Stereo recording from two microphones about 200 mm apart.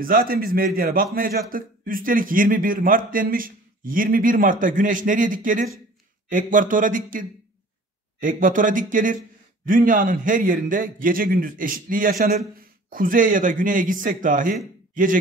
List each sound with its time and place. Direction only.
0.0 s a man's voice: 45° right (ahead or behind)